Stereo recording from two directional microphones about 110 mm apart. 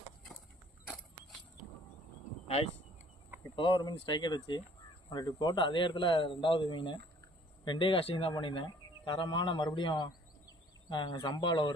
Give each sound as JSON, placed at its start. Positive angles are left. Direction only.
{"t": 3.5, "sound": "speech", "side_deg": 50}